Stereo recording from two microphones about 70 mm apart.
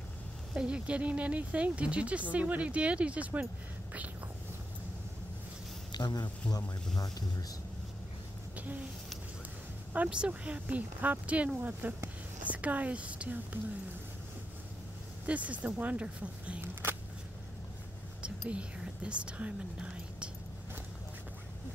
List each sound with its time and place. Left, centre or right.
0.6 s speech: centre
5.9 s speech: left
7.0 s speech: left
8.5 s a sound: right
10.0 s speech: centre
15.2 s speech: right
18.5 s speech: centre